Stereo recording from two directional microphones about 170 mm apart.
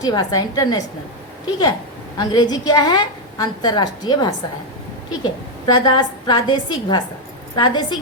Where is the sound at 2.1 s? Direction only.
25° left (ahead or behind).